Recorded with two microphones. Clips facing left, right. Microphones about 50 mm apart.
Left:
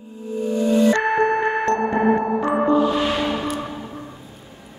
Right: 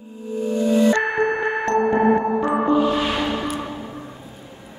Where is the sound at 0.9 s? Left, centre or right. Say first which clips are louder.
Left 2 dB; centre.